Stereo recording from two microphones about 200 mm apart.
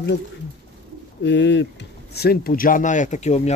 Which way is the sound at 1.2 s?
60° left (ahead or behind).